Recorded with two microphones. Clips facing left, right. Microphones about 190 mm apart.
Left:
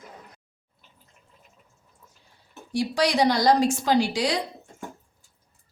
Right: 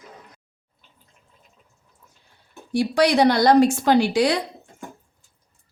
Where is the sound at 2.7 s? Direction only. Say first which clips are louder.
Right 5 dB; 60° right (ahead or behind).